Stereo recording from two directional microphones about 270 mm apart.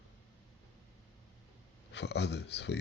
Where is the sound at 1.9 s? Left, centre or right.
Left.